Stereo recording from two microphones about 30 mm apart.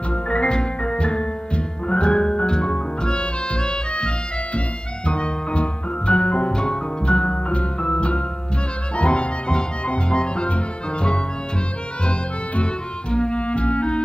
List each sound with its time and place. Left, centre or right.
0.1 s music: left
6.5 s music: left
13.1 s clarinet: left
13.4 s clarinet: left